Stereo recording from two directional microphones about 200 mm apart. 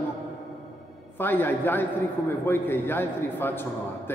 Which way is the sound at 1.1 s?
10° left (ahead or behind).